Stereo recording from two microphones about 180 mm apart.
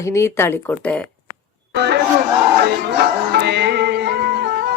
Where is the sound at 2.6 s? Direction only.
65° right (ahead or behind).